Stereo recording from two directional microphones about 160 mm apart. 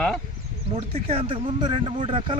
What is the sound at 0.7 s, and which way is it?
Speech, 35° right (ahead or behind).